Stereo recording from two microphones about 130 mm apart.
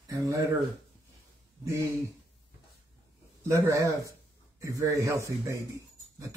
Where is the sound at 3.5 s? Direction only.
25° right (ahead or behind).